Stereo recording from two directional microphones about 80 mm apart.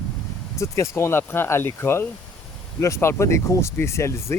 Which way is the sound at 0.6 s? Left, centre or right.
Left.